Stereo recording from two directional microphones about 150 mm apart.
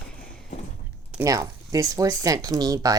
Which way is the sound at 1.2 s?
25° right (ahead or behind).